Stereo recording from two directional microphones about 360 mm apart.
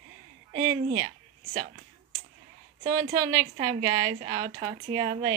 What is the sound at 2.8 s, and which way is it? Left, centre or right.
A woman's voice, centre.